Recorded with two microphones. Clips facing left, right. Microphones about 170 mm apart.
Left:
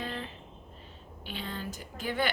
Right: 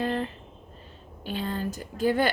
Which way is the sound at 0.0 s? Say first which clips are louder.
Right 10 dB; 45° right (ahead or behind).